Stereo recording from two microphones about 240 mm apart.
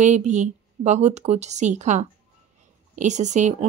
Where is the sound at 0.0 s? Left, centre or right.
Right.